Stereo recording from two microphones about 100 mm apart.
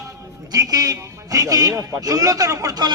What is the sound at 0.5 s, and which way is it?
A man's voice, 35° right (ahead or behind).